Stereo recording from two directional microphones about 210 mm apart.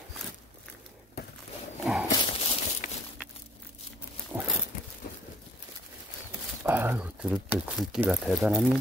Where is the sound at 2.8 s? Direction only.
40° left (ahead or behind).